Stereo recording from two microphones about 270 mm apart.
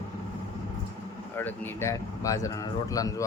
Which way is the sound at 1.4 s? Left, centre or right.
Centre.